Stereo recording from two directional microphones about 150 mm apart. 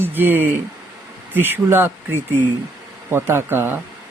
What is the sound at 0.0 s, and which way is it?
Speech, 15° right (ahead or behind).